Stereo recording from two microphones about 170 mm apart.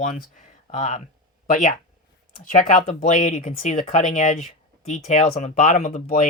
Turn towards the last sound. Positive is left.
turn(degrees=50)  # may be behind; listen again after turning